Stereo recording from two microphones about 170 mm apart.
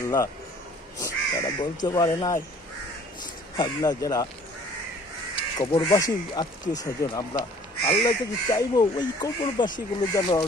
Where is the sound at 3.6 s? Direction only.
20° left (ahead or behind).